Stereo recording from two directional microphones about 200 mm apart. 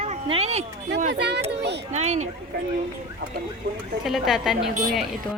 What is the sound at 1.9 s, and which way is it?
Speech, 35° right (ahead or behind).